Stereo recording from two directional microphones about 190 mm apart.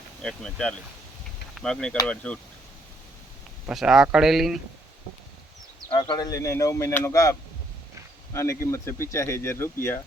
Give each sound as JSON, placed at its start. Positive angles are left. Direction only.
{"t": 0.2, "sound": "speech", "side_deg": 5}
{"t": 3.7, "sound": "speech", "side_deg": -5}
{"t": 5.9, "sound": "speech", "side_deg": 25}